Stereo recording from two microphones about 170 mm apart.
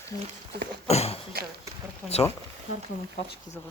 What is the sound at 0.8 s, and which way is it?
Speech, 35° left (ahead or behind).